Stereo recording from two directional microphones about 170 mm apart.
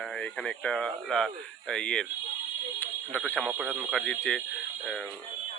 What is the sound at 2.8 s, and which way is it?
Fire alarm, 10° left (ahead or behind).